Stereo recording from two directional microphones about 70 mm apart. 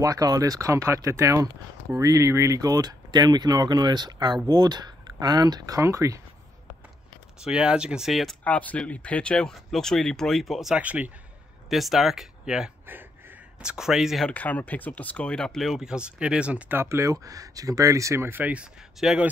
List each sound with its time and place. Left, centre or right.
0.0 s speech: right
5.8 s speech: right
7.3 s speech: centre
8.1 s speech: centre
8.5 s speech: left; by 10.8 s centre
10.8 s speech: right
11.7 s speech: centre
14.3 s speech: left; by 16.7 s centre
16.7 s speech: right
18.4 s speech: centre